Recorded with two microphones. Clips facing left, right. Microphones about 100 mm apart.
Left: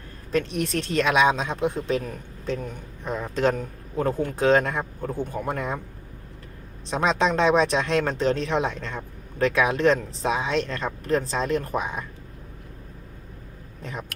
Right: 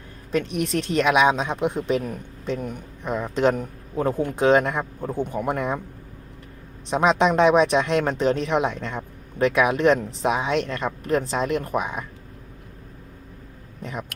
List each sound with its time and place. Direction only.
0.3 s speech: 15° right (ahead or behind)
6.9 s speech: 15° right (ahead or behind)